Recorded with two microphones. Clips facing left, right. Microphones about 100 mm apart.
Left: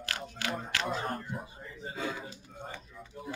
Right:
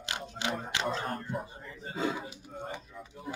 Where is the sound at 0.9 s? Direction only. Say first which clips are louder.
Right 1 dB; 5° left (ahead or behind).